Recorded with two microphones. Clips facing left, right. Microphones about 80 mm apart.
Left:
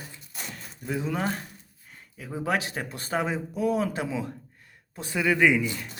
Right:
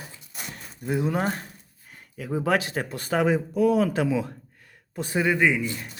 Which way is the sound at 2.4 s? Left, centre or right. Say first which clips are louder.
Right 3 dB; right.